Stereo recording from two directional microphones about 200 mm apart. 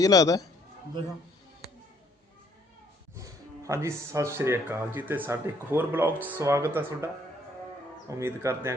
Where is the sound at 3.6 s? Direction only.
15° right (ahead or behind).